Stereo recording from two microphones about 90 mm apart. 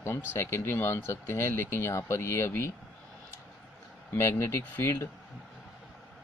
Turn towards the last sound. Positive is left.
turn(degrees=30)  # may be behind; listen again after turning